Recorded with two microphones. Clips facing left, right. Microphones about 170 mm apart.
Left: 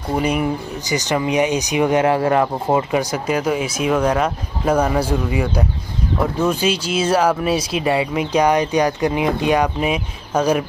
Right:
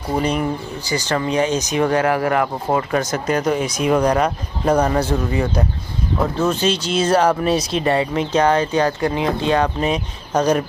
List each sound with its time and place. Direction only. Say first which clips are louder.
0.1 s speech: left 1 dB; 10° left (ahead or behind); by 2.4 s 25° left (ahead or behind)
2.7 s speech: even; 15° left (ahead or behind)